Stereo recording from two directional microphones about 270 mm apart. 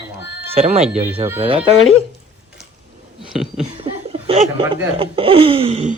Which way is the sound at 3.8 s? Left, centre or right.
Right.